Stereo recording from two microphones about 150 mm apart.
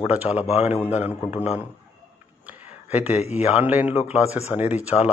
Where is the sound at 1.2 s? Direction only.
45° left (ahead or behind).